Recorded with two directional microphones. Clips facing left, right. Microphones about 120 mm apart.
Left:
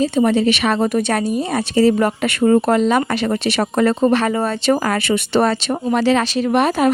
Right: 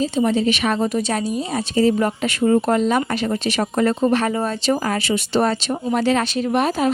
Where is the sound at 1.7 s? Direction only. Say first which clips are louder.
Left 3 dB; 75° left (ahead or behind).